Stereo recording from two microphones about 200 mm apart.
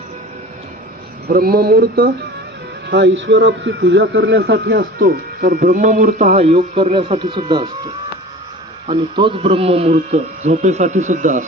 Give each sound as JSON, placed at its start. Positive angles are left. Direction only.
{"t": 1.3, "sound": "a man's voice", "side_deg": -50}
{"t": 2.9, "sound": "a man's voice", "side_deg": -60}
{"t": 8.9, "sound": "a man's voice", "side_deg": -25}